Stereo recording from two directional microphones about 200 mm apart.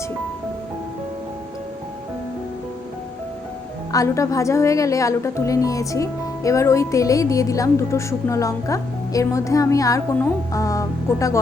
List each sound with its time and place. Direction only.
3.9 s a woman's voice: 15° left (ahead or behind)